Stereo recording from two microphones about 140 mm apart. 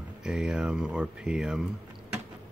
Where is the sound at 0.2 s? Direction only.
5° right (ahead or behind).